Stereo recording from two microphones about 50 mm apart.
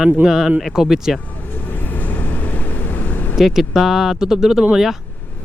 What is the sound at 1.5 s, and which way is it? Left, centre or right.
Vehicle, left.